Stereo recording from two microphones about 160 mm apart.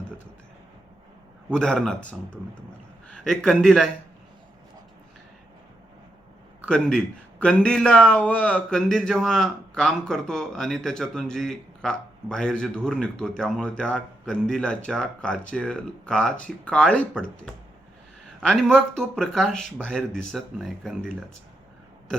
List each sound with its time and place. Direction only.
1.5 s a man's voice: 5° left (ahead or behind)
6.7 s a man's voice: 5° left (ahead or behind)
18.4 s a man's voice: 5° left (ahead or behind)